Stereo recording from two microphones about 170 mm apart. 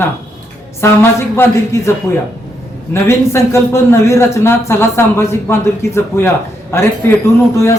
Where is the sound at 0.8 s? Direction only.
15° left (ahead or behind).